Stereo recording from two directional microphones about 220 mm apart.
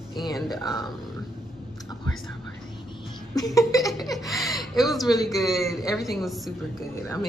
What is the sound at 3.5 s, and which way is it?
Speech, 15° left (ahead or behind).